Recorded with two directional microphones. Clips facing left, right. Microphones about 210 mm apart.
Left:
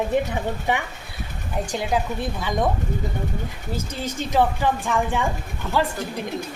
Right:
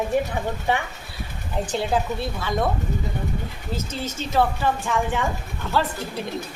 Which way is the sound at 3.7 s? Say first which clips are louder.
Left 1 dB; 15° left (ahead or behind).